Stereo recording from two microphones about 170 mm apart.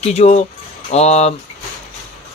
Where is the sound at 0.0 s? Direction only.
40° left (ahead or behind).